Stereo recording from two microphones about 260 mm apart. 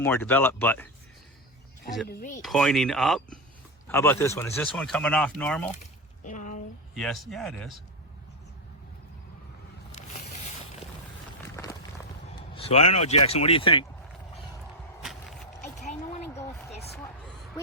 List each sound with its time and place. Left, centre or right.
0.0 s speech: centre
2.0 s speech: left
2.4 s speech: centre
6.2 s a sound: left
6.9 s speech: centre
11.4 s run: centre
12.4 s vehicle: left
13.2 s speech: left
15.6 s a sound: left
16.9 s a sound: centre